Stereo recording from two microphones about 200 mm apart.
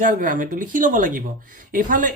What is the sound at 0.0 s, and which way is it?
Speech, 45° right (ahead or behind).